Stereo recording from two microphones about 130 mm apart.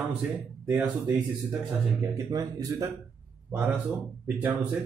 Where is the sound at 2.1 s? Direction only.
25° right (ahead or behind).